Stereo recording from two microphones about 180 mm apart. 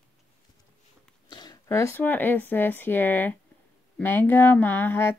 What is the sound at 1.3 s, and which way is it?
A woman's voice, 25° left (ahead or behind).